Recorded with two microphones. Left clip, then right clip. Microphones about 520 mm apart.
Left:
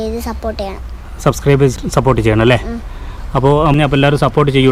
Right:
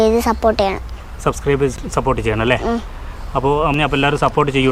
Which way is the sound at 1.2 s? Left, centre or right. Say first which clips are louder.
Left 4 dB; left.